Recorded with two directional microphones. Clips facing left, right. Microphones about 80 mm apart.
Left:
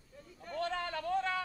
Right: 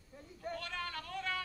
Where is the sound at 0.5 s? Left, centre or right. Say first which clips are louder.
Left 9 dB; left.